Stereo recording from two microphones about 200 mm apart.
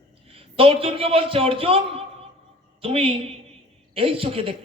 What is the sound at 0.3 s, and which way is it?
A man's voice, 30° right (ahead or behind).